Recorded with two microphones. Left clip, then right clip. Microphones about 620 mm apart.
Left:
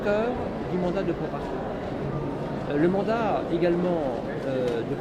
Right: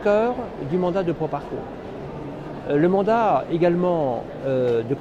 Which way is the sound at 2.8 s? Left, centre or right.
Right.